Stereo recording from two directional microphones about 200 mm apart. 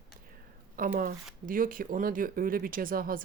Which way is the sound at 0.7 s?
45° right (ahead or behind).